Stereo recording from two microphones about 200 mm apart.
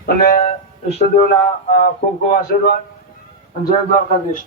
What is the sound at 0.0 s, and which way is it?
Speech, 50° left (ahead or behind).